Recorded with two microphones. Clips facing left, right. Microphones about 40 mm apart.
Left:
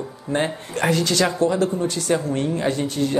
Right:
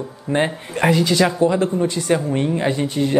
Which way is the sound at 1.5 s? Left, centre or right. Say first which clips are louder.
Right 2 dB; right.